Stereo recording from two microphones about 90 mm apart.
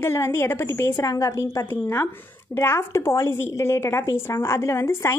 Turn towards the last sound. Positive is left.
turn(degrees=30)  # may be behind; listen again after turning